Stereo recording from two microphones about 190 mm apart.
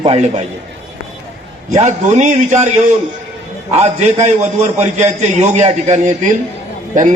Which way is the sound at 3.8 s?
35° right (ahead or behind).